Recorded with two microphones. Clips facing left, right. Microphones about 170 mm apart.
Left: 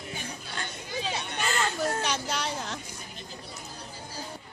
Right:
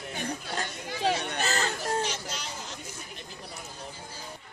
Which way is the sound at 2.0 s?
65° left (ahead or behind).